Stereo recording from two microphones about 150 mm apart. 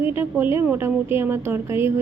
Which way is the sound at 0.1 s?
15° right (ahead or behind).